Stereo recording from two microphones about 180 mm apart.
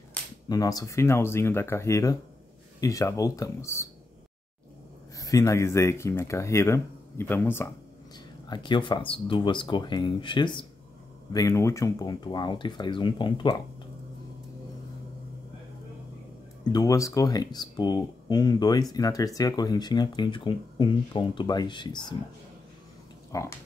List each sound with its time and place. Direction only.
0.5 s speech: 20° left (ahead or behind)
5.2 s speech: 20° left (ahead or behind)
8.5 s speech: 25° left (ahead or behind)
16.6 s speech: 20° left (ahead or behind)
23.3 s speech: 20° left (ahead or behind)